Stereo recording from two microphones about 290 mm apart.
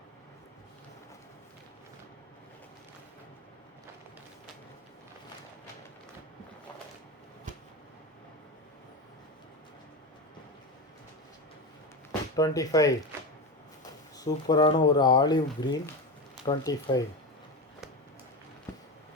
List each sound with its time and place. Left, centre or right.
12.4 s speech: centre
14.2 s speech: centre